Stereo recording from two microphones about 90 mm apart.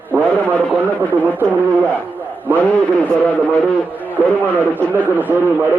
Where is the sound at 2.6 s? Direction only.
15° left (ahead or behind).